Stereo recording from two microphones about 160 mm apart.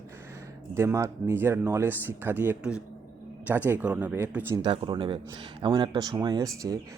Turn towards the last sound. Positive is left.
turn(degrees=-20)  # may be behind; listen again after turning